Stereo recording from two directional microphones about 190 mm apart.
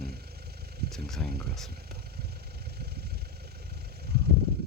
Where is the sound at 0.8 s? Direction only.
60° right (ahead or behind).